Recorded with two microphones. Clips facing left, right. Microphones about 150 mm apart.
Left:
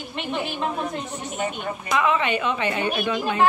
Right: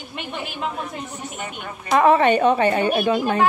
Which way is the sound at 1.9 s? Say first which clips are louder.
Right 7 dB; 45° right (ahead or behind).